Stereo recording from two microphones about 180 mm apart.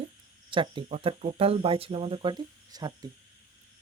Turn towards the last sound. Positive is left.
turn(degrees=-20)  # may be behind; listen again after turning